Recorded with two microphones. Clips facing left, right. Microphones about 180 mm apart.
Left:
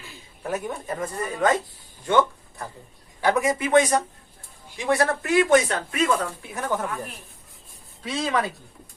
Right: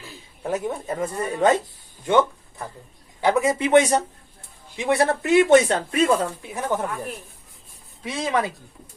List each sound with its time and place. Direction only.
0.4 s speech: 25° right (ahead or behind)
3.2 s speech: 20° right (ahead or behind)
8.0 s speech: 20° right (ahead or behind)